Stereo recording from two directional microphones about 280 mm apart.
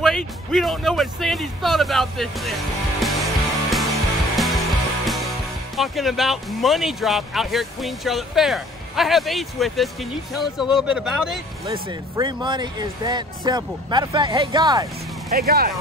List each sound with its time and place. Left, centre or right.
0.0 s speech: centre
3.7 s music: centre
5.8 s speech: centre
11.6 s speech: centre
15.3 s speech: right